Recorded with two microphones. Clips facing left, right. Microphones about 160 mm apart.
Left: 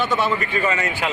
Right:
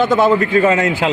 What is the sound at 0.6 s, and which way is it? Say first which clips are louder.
Speech: right 8 dB; 90° right.